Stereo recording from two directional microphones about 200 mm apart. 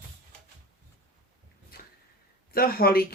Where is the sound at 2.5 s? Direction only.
50° left (ahead or behind).